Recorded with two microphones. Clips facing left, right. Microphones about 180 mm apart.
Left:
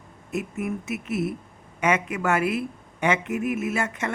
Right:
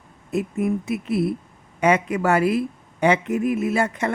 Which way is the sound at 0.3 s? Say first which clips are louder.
Right 6 dB; 35° right (ahead or behind).